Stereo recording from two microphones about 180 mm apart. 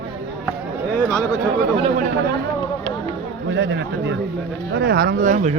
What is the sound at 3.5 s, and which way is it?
Speech, 75° right (ahead or behind).